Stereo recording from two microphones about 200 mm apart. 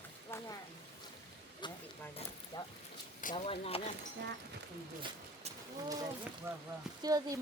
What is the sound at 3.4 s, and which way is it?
Speech, 30° left (ahead or behind).